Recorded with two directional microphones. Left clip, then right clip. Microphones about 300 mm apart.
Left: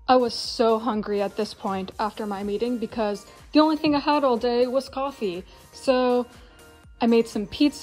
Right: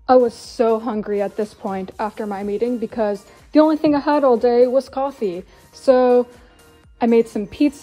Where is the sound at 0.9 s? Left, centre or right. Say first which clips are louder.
Right 3 dB; centre.